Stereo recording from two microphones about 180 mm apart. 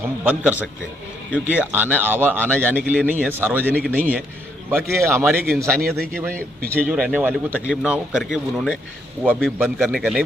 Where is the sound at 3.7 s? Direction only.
5° left (ahead or behind).